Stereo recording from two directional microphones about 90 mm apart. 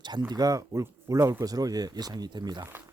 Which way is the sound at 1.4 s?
45° right (ahead or behind).